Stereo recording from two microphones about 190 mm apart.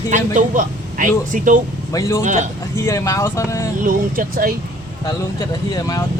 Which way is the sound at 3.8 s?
45° right (ahead or behind).